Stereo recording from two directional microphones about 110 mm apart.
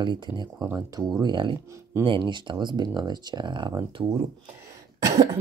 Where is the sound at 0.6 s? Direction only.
35° right (ahead or behind).